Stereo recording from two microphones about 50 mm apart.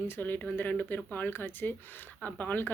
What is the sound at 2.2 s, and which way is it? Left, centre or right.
Speech, left.